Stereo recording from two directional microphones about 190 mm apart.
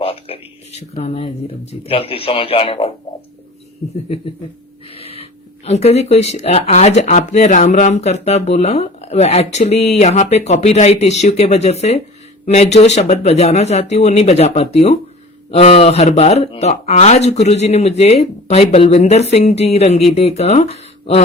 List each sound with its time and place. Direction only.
0.0 s speech: 30° left (ahead or behind)
4.9 s snort: 30° left (ahead or behind)
5.6 s speech: 35° left (ahead or behind)